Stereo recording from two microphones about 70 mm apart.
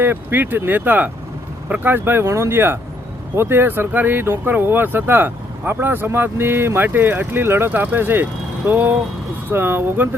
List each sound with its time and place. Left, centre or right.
0.0 s speech: right